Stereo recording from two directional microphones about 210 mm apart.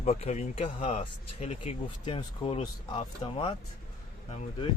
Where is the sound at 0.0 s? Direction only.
30° left (ahead or behind).